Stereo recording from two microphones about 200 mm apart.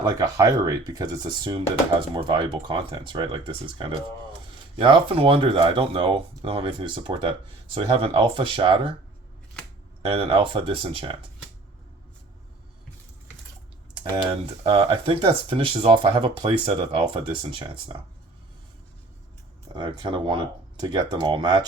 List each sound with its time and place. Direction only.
0.0 s speech: 20° right (ahead or behind)
10.0 s speech: 25° right (ahead or behind)
13.9 s speech: 25° right (ahead or behind)
19.6 s speech: 25° right (ahead or behind)